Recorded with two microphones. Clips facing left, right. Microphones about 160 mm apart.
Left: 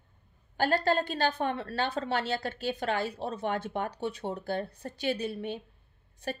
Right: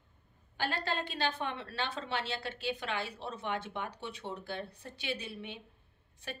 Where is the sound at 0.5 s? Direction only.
45° left (ahead or behind).